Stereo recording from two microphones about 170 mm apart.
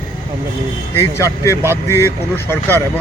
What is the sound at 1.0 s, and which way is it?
Speech, 15° left (ahead or behind).